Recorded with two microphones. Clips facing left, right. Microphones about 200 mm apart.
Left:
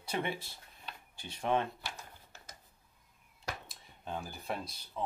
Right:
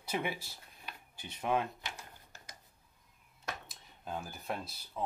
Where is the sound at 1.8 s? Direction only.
10° right (ahead or behind).